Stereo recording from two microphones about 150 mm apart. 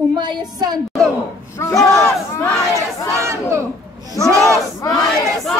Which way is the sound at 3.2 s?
20° right (ahead or behind).